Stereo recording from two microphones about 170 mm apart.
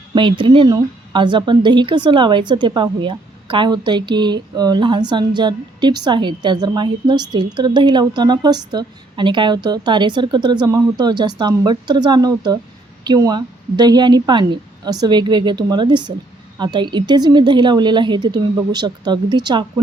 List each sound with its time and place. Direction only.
0.1 s a woman's voice: 30° right (ahead or behind)